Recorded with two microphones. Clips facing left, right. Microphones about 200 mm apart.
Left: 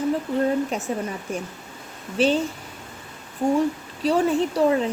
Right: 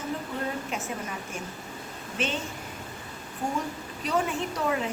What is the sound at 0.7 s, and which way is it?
Speech, 35° left (ahead or behind).